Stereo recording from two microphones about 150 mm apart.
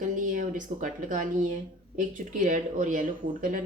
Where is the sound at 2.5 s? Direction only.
60° right (ahead or behind).